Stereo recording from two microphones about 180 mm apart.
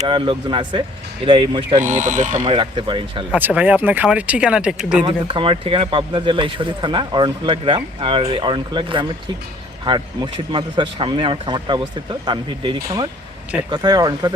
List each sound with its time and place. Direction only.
0.1 s speech: 25° right (ahead or behind)
1.8 s speech: 45° right (ahead or behind)
2.5 s speech: 30° right (ahead or behind)
3.3 s speech: 10° right (ahead or behind)
5.0 s speech: 30° right (ahead or behind)